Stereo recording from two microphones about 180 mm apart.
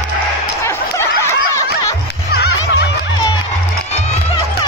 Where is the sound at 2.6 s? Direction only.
85° left.